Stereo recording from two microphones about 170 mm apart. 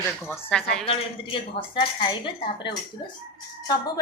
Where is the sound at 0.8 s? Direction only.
35° left (ahead or behind).